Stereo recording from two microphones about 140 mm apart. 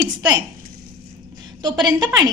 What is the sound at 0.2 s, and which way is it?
Speech, 30° right (ahead or behind).